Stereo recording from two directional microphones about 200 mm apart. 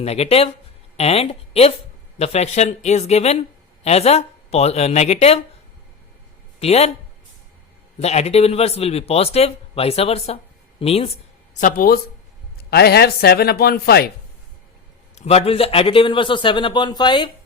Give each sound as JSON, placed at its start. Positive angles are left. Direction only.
{"t": 0.0, "sound": "a woman's voice", "side_deg": 30}
{"t": 6.6, "sound": "speech", "side_deg": 30}
{"t": 7.9, "sound": "speech", "side_deg": 35}
{"t": 11.6, "sound": "speech", "side_deg": 45}
{"t": 15.1, "sound": "a man's voice", "side_deg": 30}